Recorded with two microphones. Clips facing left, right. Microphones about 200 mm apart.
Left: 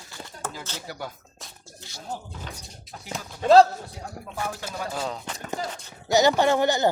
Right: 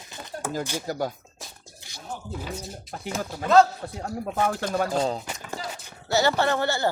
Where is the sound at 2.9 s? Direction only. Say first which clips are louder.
Right 5 dB; 55° right (ahead or behind).